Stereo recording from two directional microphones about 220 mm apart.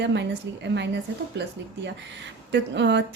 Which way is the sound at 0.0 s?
55° right (ahead or behind).